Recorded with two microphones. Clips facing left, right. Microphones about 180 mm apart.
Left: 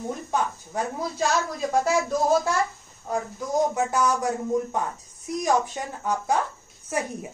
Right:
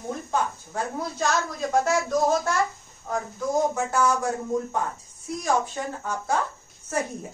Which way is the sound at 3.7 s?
15° left (ahead or behind).